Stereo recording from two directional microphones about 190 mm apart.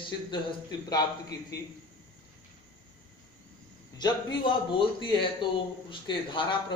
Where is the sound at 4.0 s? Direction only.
20° left (ahead or behind).